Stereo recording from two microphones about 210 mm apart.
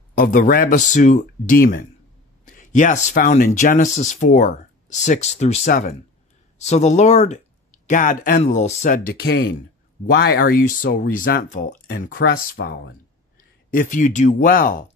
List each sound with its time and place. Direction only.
0.1 s speech: 40° left (ahead or behind)